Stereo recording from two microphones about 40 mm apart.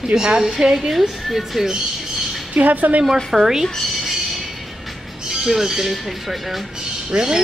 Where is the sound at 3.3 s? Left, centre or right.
Centre.